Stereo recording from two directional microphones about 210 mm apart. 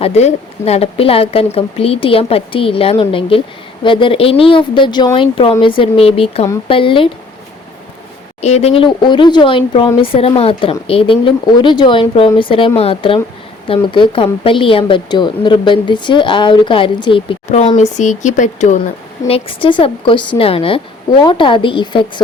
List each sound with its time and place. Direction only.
0.0 s speech: 30° left (ahead or behind)
8.4 s speech: 30° left (ahead or behind)
19.3 s speech: 25° left (ahead or behind)